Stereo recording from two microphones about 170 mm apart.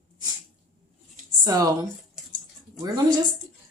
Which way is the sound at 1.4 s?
20° right (ahead or behind).